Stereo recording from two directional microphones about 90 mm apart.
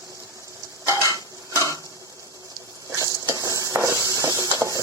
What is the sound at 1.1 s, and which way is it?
Stir, 35° right (ahead or behind).